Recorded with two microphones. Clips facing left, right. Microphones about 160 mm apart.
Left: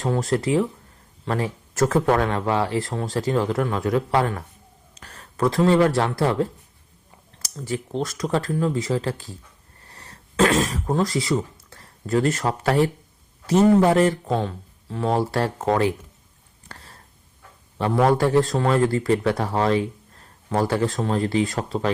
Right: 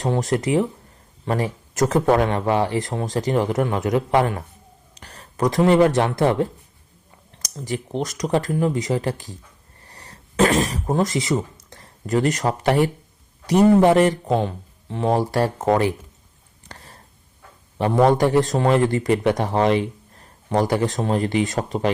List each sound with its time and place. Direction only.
0.0 s speech: 20° right (ahead or behind)
7.5 s speech: 40° right (ahead or behind)
7.9 s speech: 20° right (ahead or behind)
9.8 s throat clearing: 15° right (ahead or behind)
11.7 s speech: 15° right (ahead or behind)
16.6 s a sound: 15° right (ahead or behind)
17.7 s speech: 15° right (ahead or behind)